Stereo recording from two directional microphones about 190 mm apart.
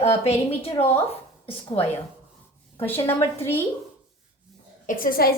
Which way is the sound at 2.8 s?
10° left (ahead or behind).